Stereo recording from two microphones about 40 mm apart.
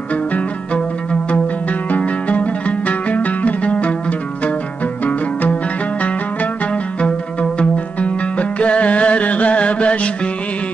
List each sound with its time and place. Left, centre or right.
1.9 s zither: left
7.0 s music: left